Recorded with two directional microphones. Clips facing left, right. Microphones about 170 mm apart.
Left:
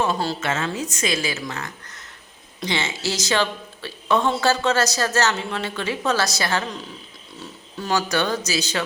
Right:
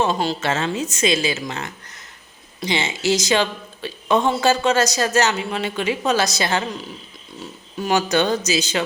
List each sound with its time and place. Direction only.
0.0 s a woman's voice: 20° right (ahead or behind)
7.8 s a woman's voice: 15° right (ahead or behind)